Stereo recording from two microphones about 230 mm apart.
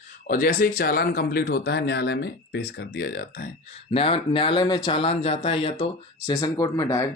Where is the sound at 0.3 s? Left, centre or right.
Left.